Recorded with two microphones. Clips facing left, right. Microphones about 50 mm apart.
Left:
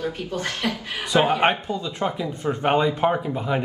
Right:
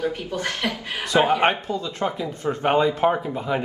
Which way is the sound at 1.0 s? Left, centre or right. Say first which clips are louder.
Even; centre.